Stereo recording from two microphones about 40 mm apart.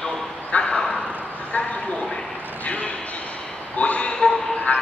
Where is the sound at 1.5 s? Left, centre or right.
Left.